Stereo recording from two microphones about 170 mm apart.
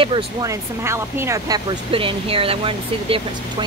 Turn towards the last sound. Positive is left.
turn(degrees=-35)  # may be behind; listen again after turning